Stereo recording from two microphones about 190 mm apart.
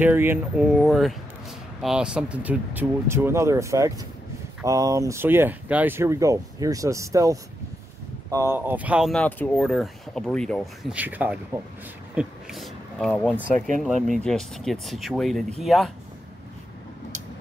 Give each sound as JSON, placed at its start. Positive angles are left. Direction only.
{"t": 0.0, "sound": "speech", "side_deg": -10}
{"t": 0.7, "sound": "speech", "side_deg": 0}
{"t": 12.2, "sound": "a sound", "side_deg": 0}
{"t": 13.7, "sound": "speech", "side_deg": 0}